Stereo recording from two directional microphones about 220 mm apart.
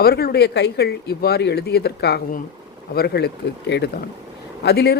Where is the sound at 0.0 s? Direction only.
45° left (ahead or behind).